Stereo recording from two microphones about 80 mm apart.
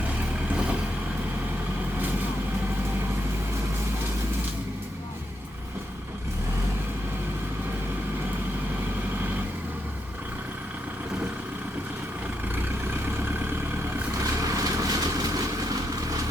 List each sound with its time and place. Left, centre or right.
14.2 s vehicle: right